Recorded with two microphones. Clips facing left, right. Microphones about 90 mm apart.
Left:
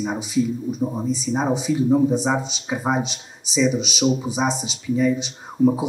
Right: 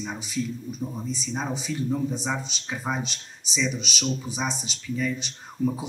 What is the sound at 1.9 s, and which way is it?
Speech, 30° left (ahead or behind).